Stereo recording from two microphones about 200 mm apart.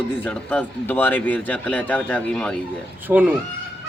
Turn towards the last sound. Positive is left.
turn(degrees=-10)  # may be behind; listen again after turning